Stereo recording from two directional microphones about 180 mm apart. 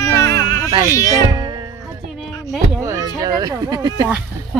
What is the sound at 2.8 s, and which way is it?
Speech, 15° right (ahead or behind).